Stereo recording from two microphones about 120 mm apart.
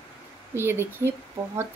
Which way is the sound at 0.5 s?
20° right (ahead or behind).